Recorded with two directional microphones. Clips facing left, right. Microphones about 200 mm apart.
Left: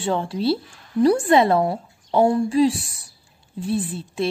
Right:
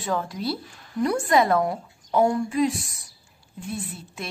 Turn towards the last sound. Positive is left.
turn(degrees=30)  # may be behind; listen again after turning